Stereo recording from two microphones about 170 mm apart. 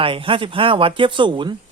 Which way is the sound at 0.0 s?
30° right (ahead or behind).